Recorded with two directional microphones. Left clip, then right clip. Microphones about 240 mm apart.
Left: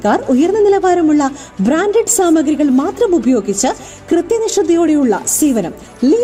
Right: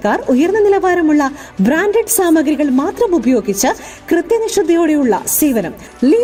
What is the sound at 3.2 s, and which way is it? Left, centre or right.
A woman's voice, centre.